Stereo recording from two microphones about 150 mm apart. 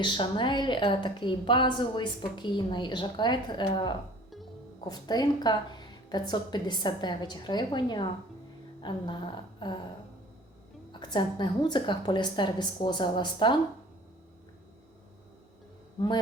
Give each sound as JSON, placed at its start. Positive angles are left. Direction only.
{"t": 0.0, "sound": "a woman's voice", "side_deg": 30}
{"t": 11.0, "sound": "a woman's voice", "side_deg": 30}